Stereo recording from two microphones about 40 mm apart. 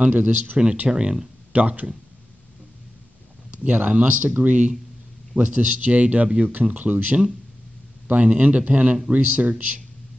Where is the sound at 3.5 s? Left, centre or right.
Right.